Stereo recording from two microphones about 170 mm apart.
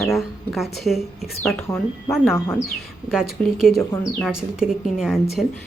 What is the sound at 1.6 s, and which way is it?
Speech, 15° left (ahead or behind).